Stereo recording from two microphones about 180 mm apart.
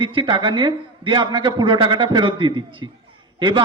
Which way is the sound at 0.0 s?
25° right (ahead or behind).